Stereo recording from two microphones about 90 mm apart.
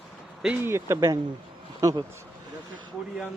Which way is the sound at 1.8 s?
40° right (ahead or behind).